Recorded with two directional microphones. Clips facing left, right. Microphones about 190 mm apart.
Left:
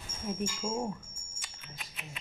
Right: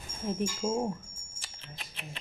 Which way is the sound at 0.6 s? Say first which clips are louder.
Right 5 dB; 15° right (ahead or behind).